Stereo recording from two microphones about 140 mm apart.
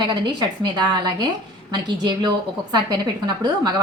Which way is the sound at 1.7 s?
30° right (ahead or behind).